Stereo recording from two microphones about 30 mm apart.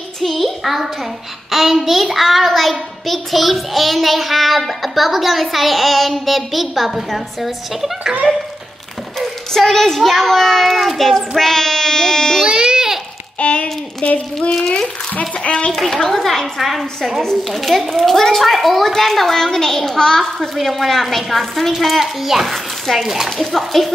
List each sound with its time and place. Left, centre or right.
0.2 s a sound: centre
1.5 s child singing: centre
9.5 s a child's voice: centre
10.9 s child singing: centre
11.1 s a child's voice: centre
12.5 s babbling: right
13.4 s a sound: left
15.7 s a child's voice: centre
16.5 s child singing: centre
18.9 s a child's voice: centre
20.5 s child singing: centre
22.0 s a child's voice: centre
23.3 s child singing: centre